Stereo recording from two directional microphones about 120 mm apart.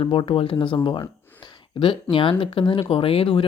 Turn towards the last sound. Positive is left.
turn(degrees=50)  # may be behind; listen again after turning